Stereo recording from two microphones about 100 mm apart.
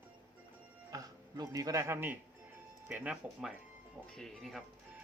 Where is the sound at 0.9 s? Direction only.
40° right (ahead or behind); by 2.1 s 25° right (ahead or behind).